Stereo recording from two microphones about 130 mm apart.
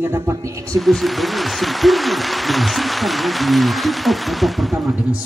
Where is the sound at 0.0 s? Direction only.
20° right (ahead or behind).